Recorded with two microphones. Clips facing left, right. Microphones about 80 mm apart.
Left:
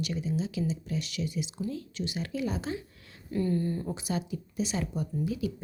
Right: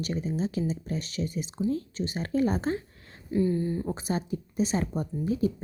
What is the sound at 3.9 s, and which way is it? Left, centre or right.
Speech, right.